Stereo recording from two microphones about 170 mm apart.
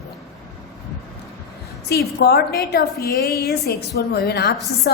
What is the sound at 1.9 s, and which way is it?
A woman's voice, 70° left (ahead or behind).